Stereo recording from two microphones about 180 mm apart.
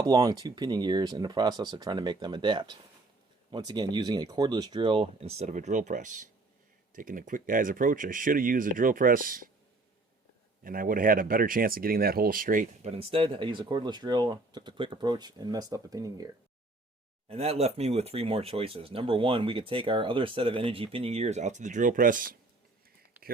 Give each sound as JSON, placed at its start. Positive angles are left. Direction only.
{"t": 0.0, "sound": "speech", "side_deg": -20}
{"t": 10.6, "sound": "speech", "side_deg": -50}
{"t": 12.9, "sound": "speech", "side_deg": -30}
{"t": 17.2, "sound": "speech", "side_deg": -35}